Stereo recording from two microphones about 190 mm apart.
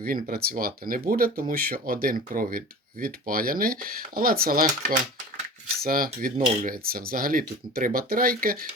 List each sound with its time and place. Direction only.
0.0 s speech: 50° right (ahead or behind)